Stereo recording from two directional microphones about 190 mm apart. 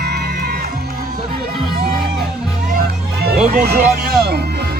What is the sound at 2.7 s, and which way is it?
Music, 55° right (ahead or behind).